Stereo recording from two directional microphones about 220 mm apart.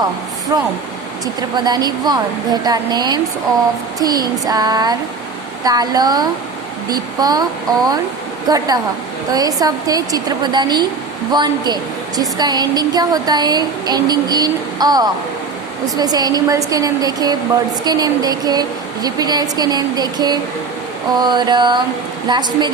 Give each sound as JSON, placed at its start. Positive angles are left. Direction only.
{"t": 0.5, "sound": "a woman's voice", "side_deg": -15}
{"t": 8.4, "sound": "a woman's voice", "side_deg": -15}